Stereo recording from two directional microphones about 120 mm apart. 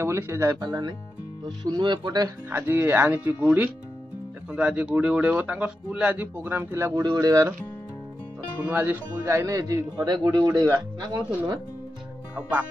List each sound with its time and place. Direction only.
0.0 s speech: 20° right (ahead or behind); by 2.2 s 40° right (ahead or behind)
2.5 s speech: 20° right (ahead or behind)
8.5 s speech: 15° right (ahead or behind); by 11.6 s 35° right (ahead or behind)
12.4 s speech: 15° right (ahead or behind)